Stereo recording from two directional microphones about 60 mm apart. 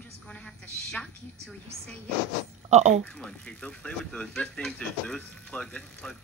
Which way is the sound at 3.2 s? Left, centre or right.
Centre.